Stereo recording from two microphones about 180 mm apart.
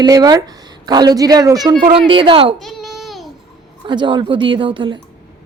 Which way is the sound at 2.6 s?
Centre (ahead or behind).